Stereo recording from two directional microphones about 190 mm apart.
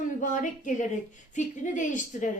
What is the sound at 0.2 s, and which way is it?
A woman's voice, 40° left (ahead or behind).